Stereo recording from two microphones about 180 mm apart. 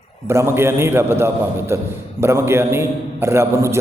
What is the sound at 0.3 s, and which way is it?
A man's voice, 15° right (ahead or behind).